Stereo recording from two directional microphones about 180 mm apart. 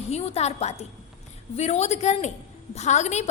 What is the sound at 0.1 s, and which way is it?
A woman's voice, 35° left (ahead or behind).